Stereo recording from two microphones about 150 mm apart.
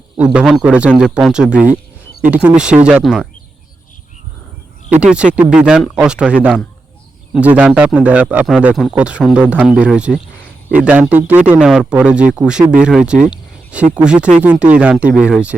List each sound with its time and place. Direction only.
0.3 s speech: 5° right (ahead or behind)
4.9 s speech: 10° right (ahead or behind)